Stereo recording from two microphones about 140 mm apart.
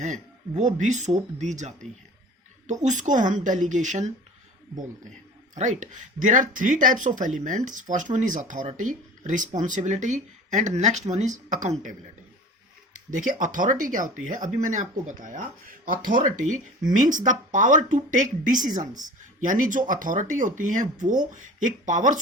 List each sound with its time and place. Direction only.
0.0 s speech: 60° right (ahead or behind)
2.8 s speech: 60° right (ahead or behind)
5.5 s speech: 60° right (ahead or behind)
13.1 s speech: 65° right (ahead or behind)